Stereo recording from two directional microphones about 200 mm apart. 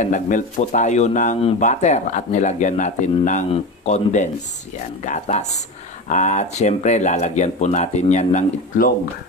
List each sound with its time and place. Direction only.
0.0 s speech: 40° left (ahead or behind)